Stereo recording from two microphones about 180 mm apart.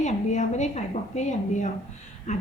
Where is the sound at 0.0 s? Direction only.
40° left (ahead or behind).